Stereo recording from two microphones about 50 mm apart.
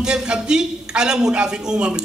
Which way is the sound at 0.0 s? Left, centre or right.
Centre.